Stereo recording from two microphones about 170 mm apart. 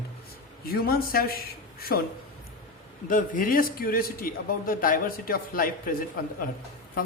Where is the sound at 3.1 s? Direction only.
55° left (ahead or behind).